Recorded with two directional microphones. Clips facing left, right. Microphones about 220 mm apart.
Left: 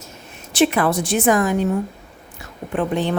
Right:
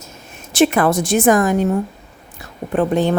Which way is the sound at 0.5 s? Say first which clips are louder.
Right 3 dB; 45° right (ahead or behind).